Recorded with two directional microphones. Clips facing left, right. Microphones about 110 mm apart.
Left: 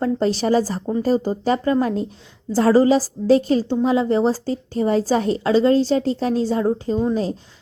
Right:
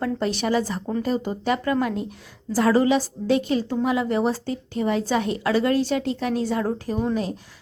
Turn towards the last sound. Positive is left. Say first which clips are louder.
# left 4 dB
turn(degrees=25)  # may be behind; listen again after turning